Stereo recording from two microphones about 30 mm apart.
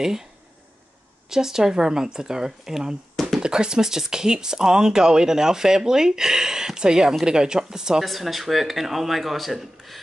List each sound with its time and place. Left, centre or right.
0.0 s speech: centre
1.3 s speech: centre
8.0 s speech: centre